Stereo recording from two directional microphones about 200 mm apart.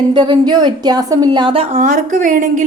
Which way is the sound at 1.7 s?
40° right (ahead or behind).